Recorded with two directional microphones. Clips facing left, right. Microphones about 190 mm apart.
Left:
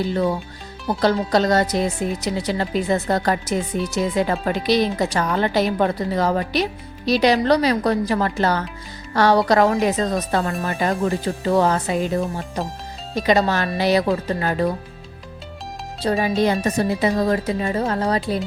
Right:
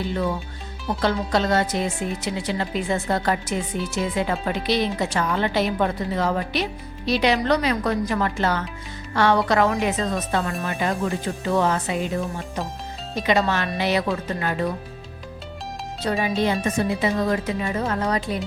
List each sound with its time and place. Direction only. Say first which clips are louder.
0.9 s speech: left 4 dB; 40° left (ahead or behind)
16.0 s speech: left 4 dB; 35° left (ahead or behind)